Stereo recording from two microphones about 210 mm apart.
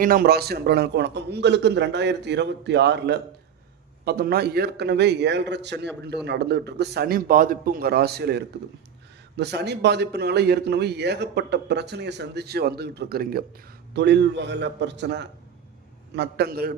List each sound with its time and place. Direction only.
0.0 s a man's voice: 45° right (ahead or behind)